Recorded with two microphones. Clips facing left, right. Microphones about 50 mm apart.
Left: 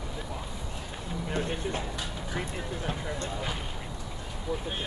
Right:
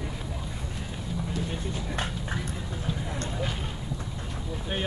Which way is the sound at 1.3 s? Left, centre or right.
Left.